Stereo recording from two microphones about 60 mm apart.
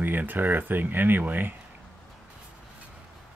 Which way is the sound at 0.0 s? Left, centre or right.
Right.